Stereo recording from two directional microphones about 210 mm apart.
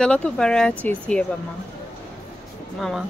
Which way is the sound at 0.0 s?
5° left (ahead or behind).